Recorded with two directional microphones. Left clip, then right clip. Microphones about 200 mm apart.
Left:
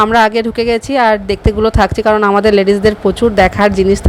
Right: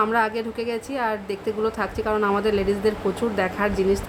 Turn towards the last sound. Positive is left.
turn(degrees=40)  # may be behind; listen again after turning